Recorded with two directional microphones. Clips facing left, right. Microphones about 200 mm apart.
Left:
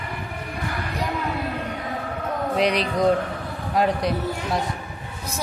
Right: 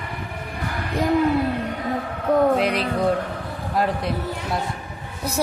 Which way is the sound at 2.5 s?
5° right (ahead or behind).